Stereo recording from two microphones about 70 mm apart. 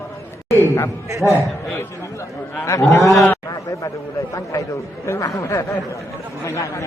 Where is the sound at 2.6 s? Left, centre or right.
Left.